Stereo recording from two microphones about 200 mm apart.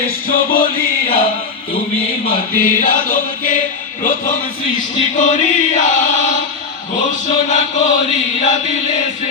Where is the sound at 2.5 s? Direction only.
40° left (ahead or behind).